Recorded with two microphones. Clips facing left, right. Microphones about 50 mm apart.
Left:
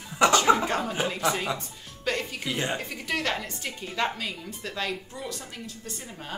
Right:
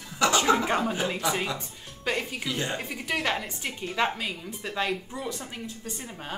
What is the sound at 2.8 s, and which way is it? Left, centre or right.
Speech, centre.